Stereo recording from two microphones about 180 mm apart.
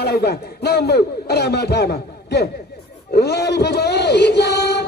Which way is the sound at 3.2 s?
65° left (ahead or behind).